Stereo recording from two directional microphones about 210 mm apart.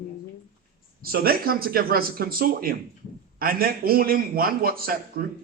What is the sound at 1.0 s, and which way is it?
A man's voice, 45° right (ahead or behind).